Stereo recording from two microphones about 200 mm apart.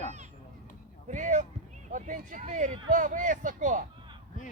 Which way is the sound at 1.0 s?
40° right (ahead or behind).